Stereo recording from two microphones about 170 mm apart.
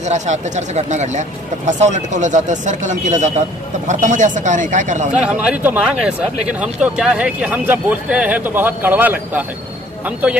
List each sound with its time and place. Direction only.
0.0 s a man's voice: 45° right (ahead or behind)
5.2 s speech: 5° right (ahead or behind)